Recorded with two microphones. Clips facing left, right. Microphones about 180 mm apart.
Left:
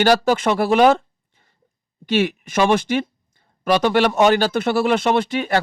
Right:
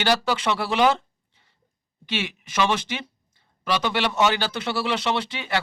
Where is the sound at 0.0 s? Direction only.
45° left (ahead or behind).